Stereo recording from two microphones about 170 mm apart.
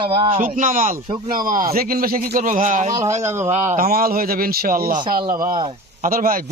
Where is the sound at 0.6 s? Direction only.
50° right (ahead or behind).